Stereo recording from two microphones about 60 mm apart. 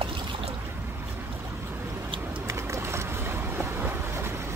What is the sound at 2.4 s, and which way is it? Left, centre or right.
Boat, right.